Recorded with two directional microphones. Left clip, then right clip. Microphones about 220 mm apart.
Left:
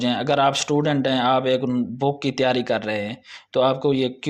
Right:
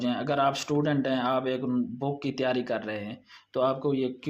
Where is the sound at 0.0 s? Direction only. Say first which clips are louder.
Left 7 dB; 35° left (ahead or behind).